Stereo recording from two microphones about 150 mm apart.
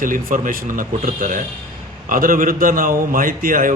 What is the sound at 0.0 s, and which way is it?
A man's voice, 65° right (ahead or behind).